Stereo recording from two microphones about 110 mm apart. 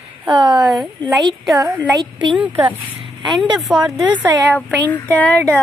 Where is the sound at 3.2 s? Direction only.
45° right (ahead or behind).